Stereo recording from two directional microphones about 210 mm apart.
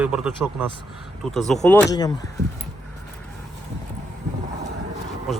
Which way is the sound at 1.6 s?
15° left (ahead or behind).